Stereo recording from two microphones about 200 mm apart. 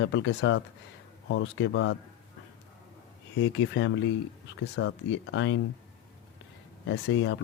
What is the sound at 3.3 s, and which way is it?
Speech, 70° left (ahead or behind).